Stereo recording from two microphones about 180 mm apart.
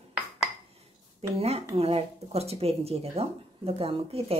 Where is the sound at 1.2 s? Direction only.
35° right (ahead or behind).